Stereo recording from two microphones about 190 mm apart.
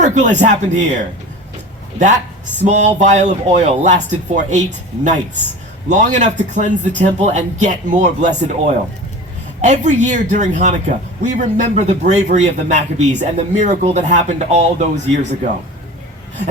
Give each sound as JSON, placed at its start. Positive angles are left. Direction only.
{"t": 0.0, "sound": "a man's voice", "side_deg": -40}